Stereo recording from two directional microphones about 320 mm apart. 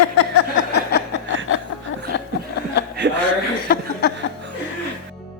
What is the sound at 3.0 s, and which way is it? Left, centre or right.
Chuckle, right.